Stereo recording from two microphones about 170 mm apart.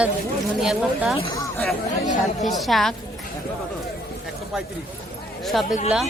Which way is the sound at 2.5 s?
Centre (ahead or behind).